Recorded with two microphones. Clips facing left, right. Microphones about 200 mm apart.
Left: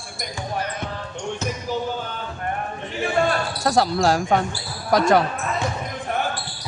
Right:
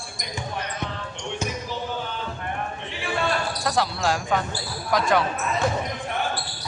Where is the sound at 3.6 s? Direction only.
40° left (ahead or behind).